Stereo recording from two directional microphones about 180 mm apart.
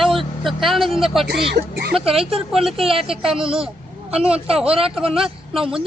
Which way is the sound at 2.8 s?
30° right (ahead or behind).